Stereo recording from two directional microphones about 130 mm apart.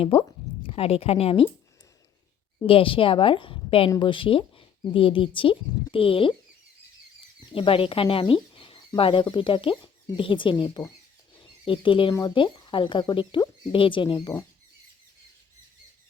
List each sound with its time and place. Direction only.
0.0 s speech: 45° left (ahead or behind)
2.6 s speech: 45° left (ahead or behind)
7.5 s speech: 45° left (ahead or behind)
11.3 s a sound: 40° left (ahead or behind)
12.2 s speech: 40° left (ahead or behind)